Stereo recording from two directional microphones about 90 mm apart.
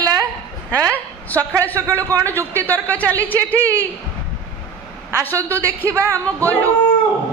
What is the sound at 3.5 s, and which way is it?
Speech, 35° right (ahead or behind).